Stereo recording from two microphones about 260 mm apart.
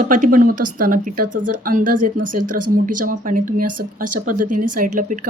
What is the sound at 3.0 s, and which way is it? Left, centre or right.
Speech, right.